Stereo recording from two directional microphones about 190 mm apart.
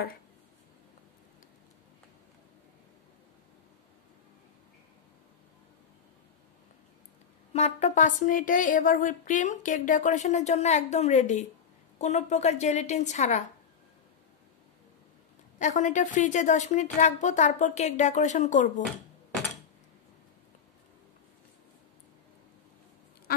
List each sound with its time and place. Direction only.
7.5 s speech: 35° left (ahead or behind)
15.6 s speech: 40° left (ahead or behind)